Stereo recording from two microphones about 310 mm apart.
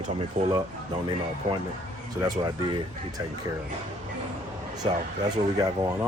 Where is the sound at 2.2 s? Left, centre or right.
Centre.